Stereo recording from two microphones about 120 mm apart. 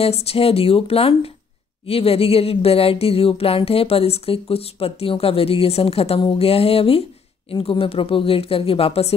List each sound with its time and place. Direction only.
0.0 s speech: 55° left (ahead or behind)